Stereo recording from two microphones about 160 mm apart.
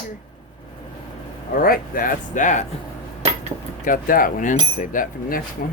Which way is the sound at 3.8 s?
60° left (ahead or behind).